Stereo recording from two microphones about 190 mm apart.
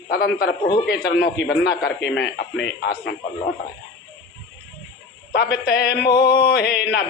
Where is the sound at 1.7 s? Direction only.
60° left (ahead or behind).